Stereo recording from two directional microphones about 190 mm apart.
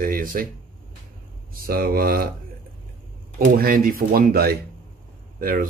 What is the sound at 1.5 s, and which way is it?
Speech, 50° right (ahead or behind).